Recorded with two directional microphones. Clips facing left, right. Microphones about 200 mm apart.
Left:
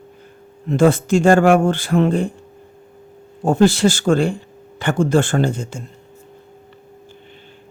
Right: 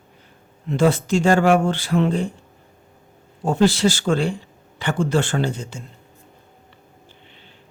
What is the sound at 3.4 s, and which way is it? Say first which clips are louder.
Speech: left 3 dB; 50° left (ahead or behind).